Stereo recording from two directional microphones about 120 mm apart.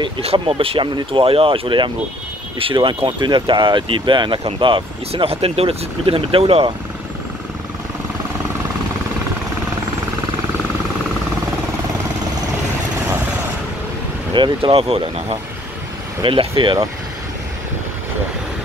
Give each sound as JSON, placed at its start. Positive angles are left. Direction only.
{"t": 0.2, "sound": "speech", "side_deg": -55}
{"t": 14.3, "sound": "speech", "side_deg": -45}